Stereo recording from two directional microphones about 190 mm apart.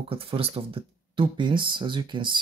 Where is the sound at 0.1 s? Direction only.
30° right (ahead or behind).